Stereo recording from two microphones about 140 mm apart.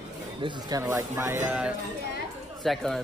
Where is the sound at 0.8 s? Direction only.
15° right (ahead or behind).